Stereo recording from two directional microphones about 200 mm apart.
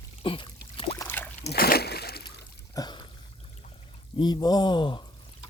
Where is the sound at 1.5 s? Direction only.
50° left (ahead or behind).